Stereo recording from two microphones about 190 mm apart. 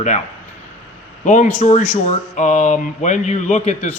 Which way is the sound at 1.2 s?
40° left (ahead or behind).